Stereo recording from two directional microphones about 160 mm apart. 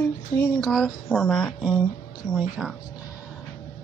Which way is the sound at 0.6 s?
Centre (ahead or behind).